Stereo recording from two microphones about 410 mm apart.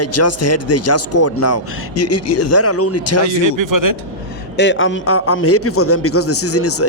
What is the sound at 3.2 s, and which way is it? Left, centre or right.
Speech, right.